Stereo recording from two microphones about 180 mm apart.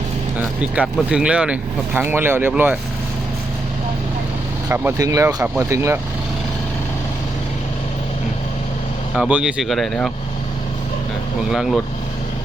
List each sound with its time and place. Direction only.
0.3 s speech: 5° right (ahead or behind)
4.7 s speech: 15° right (ahead or behind)
9.1 s speech: 5° right (ahead or behind)
11.5 s speech: centre (ahead or behind)